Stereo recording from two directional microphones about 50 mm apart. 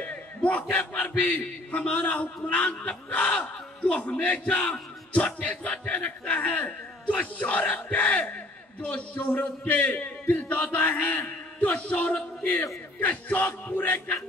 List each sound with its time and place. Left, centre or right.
0.0 s a sound: left
1.7 s a man's voice: left
13.0 s music: left